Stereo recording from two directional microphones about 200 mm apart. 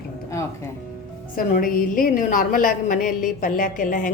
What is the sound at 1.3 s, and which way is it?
A woman's voice, 45° left (ahead or behind).